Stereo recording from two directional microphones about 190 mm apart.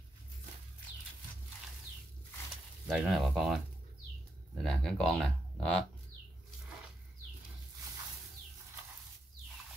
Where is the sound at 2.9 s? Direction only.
Centre (ahead or behind).